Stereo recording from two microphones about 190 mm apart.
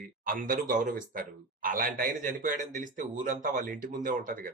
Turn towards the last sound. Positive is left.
turn(degrees=-45)  # may be behind; listen again after turning